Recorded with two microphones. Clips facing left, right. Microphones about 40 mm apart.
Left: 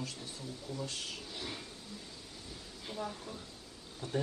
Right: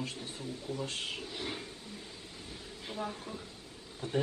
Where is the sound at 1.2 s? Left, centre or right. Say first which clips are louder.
Right 3 dB; right.